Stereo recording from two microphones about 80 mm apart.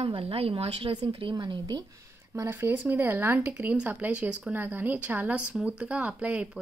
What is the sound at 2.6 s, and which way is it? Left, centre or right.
Speech, right.